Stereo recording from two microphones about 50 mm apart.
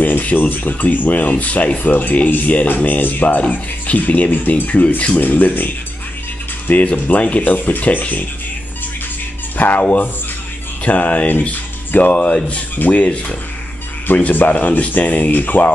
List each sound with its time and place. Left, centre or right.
0.0 s speech: left
5.2 s speech: left
6.7 s speech: left
9.6 s speech: left